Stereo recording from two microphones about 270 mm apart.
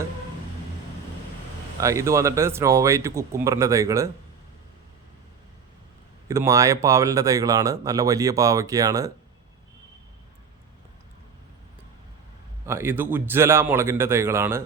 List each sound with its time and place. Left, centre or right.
1.8 s speech: centre
6.2 s speech: centre
12.6 s speech: centre